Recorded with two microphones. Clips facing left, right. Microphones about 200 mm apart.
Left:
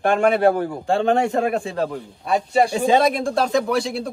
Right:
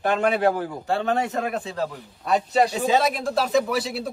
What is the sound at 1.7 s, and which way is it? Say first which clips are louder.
Speech: left 4 dB; 55° left (ahead or behind).